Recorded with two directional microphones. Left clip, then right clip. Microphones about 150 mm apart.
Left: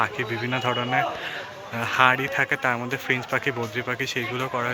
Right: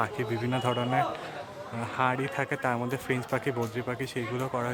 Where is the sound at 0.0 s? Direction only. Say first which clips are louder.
Left 5 dB; 15° right (ahead or behind).